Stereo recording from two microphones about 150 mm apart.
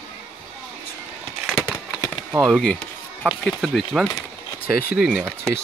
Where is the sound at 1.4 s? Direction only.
Centre (ahead or behind).